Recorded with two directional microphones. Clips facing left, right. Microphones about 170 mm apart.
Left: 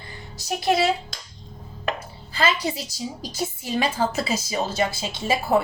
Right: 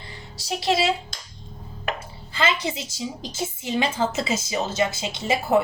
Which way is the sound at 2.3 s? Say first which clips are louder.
Left 1 dB; 20° right (ahead or behind).